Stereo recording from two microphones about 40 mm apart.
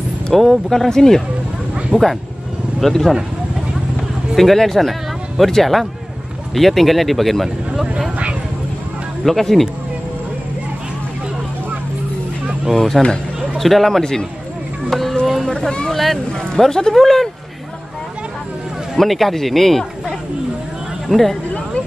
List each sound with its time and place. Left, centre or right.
0.3 s speech: centre
1.9 s speech: left
2.8 s speech: centre
4.4 s speech: centre
7.4 s speech: centre
9.2 s speech: centre
12.7 s speech: centre
14.9 s a sound: centre
15.9 s speech: centre
18.9 s speech: centre
21.1 s speech: centre